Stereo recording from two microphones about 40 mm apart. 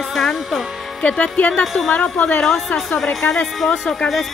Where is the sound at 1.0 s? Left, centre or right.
Left.